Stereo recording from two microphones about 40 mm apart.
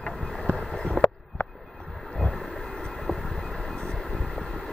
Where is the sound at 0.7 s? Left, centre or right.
Centre.